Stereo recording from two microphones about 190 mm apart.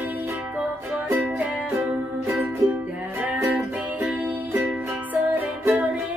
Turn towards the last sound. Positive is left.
turn(degrees=-10)  # may be behind; listen again after turning